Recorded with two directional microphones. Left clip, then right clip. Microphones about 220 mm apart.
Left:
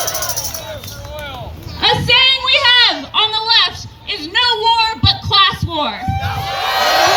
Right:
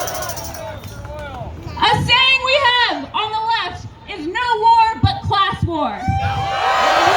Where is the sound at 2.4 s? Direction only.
5° right (ahead or behind).